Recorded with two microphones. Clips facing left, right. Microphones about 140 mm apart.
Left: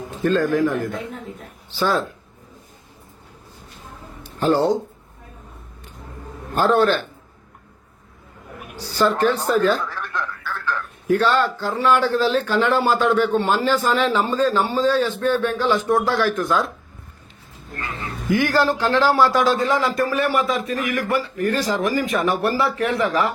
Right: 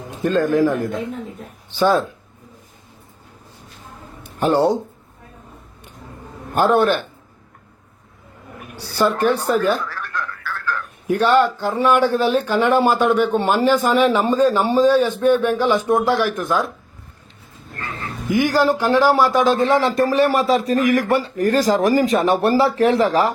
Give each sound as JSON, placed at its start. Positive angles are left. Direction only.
{"t": 0.2, "sound": "a man's voice", "side_deg": -15}
{"t": 4.4, "sound": "speech", "side_deg": -15}
{"t": 6.5, "sound": "speech", "side_deg": -15}
{"t": 9.0, "sound": "speech", "side_deg": -15}
{"t": 9.9, "sound": "telephone", "side_deg": 20}
{"t": 11.1, "sound": "speech", "side_deg": -15}
{"t": 18.3, "sound": "a man's voice", "side_deg": -15}